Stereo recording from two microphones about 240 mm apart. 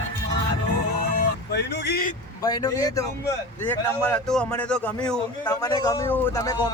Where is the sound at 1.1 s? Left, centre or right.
Left.